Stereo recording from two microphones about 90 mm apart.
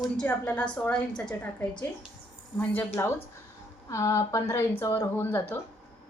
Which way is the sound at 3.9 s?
35° left (ahead or behind).